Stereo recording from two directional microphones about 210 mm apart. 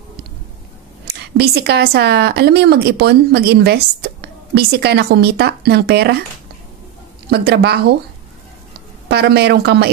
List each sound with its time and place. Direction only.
1.0 s speech: 50° right (ahead or behind)
7.2 s speech: 50° right (ahead or behind)
9.1 s speech: 50° right (ahead or behind)